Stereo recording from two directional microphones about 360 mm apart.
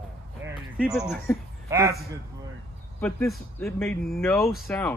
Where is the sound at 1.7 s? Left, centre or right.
Centre.